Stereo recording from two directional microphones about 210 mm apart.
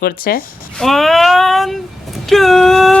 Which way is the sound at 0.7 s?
Centre (ahead or behind).